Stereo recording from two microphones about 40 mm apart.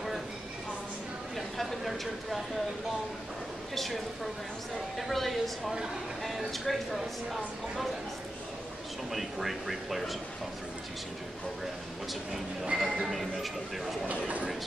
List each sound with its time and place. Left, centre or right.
1.3 s a sound: centre
3.7 s speech: centre
9.1 s speech: centre
12.7 s speech: centre
13.1 s speech: centre
14.0 s speech: right